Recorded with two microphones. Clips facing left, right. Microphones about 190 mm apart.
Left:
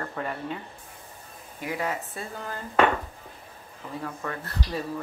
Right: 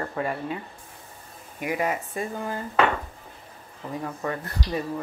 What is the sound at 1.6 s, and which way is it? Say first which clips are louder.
Speech: right 4 dB; 15° right (ahead or behind).